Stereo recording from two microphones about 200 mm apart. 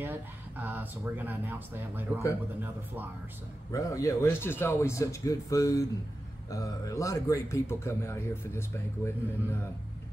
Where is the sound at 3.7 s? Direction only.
15° left (ahead or behind).